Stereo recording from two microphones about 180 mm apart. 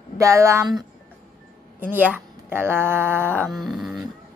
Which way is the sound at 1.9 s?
10° right (ahead or behind).